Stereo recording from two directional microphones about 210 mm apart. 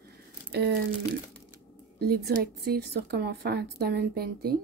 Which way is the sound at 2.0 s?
50° right (ahead or behind).